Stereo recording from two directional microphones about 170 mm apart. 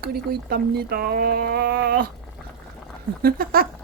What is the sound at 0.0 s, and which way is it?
Speech, 65° right (ahead or behind).